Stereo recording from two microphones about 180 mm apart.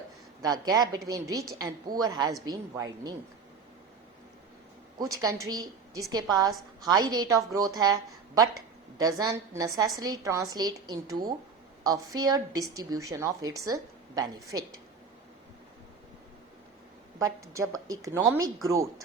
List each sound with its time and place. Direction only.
0.4 s a woman's voice: 20° right (ahead or behind)
4.9 s a woman's voice: 20° right (ahead or behind)
9.0 s a woman's voice: 20° right (ahead or behind)
17.2 s speech: 20° right (ahead or behind)